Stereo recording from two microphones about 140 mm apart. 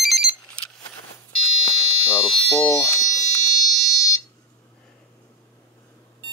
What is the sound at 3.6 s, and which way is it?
Alarm, 25° left (ahead or behind).